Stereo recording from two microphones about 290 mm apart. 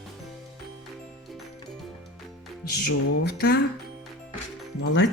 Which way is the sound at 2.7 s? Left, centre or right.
Left.